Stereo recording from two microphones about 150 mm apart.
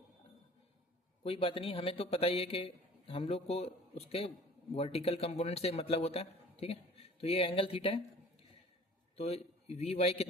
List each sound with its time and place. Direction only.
1.2 s a man's voice: 40° left (ahead or behind)
9.1 s a man's voice: 45° left (ahead or behind)